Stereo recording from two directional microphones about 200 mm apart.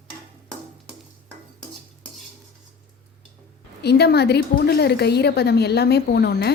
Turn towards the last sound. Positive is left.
turn(degrees=55)  # may be behind; listen again after turning